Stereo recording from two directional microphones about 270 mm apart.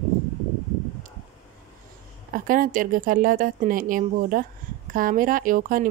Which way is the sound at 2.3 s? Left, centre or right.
Right.